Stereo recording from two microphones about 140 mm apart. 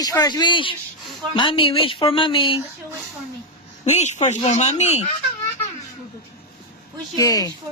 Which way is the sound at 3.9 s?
55° left (ahead or behind).